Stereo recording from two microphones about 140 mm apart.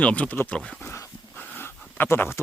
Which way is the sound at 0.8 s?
15° left (ahead or behind).